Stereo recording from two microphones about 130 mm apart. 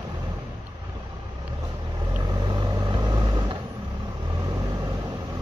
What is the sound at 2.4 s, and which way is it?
Vehicle, 35° right (ahead or behind).